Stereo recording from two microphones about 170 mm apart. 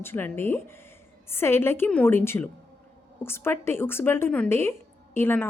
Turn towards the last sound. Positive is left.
turn(degrees=10)  # may be behind; listen again after turning